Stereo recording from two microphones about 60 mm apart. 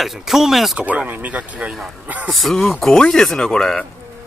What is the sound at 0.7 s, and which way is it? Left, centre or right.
A man's voice, right.